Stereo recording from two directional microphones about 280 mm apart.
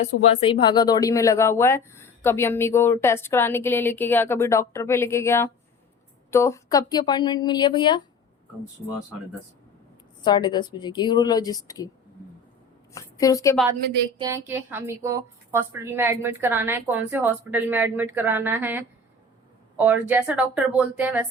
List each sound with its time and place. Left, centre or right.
0.2 s speech: left
10.2 s speech: centre
12.9 s a woman's voice: centre
14.2 s a woman's voice: centre